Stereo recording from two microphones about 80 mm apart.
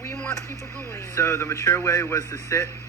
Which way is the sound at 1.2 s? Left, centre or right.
Left.